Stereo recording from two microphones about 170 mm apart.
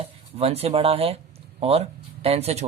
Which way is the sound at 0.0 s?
35° right (ahead or behind).